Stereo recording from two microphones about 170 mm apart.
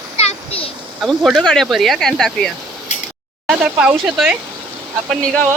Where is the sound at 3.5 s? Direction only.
5° right (ahead or behind).